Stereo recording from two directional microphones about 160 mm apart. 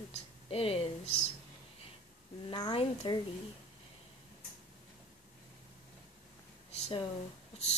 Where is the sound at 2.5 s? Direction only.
25° left (ahead or behind).